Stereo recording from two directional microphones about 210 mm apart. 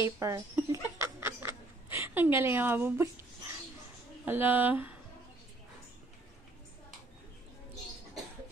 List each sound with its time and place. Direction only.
0.0 s music: 10° right (ahead or behind)
4.3 s speech: 10° right (ahead or behind)